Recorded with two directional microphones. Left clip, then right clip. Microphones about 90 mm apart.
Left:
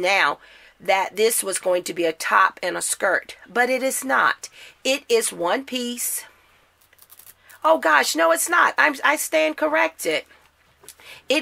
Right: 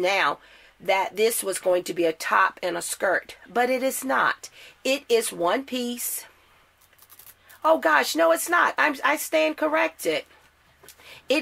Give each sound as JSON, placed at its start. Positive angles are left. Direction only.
{"t": 0.0, "sound": "speech", "side_deg": 40}
{"t": 7.6, "sound": "speech", "side_deg": 35}
{"t": 10.9, "sound": "a sound", "side_deg": 35}